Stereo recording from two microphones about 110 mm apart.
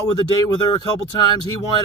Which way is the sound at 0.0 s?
35° left (ahead or behind).